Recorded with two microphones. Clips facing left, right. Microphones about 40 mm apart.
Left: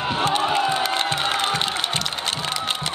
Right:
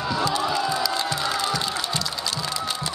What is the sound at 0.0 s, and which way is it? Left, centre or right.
Music, left.